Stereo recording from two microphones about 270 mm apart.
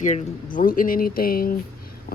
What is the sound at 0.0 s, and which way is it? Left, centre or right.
Speech, left.